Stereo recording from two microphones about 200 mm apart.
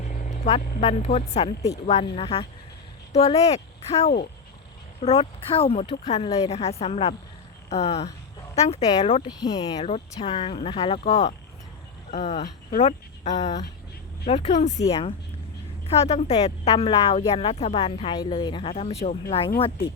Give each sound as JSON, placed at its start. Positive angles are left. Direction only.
{"t": 0.3, "sound": "a woman's voice", "side_deg": 30}
{"t": 9.2, "sound": "a woman's voice", "side_deg": 20}
{"t": 9.8, "sound": "a woman's voice", "side_deg": 30}
{"t": 14.8, "sound": "a woman's voice", "side_deg": 15}
{"t": 15.9, "sound": "a woman's voice", "side_deg": 35}